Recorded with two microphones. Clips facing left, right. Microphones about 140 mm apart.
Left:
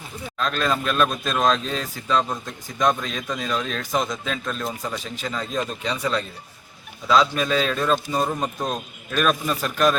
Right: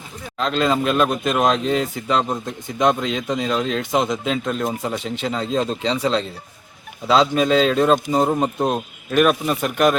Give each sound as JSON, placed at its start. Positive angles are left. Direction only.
{"t": 0.3, "sound": "speech", "side_deg": -20}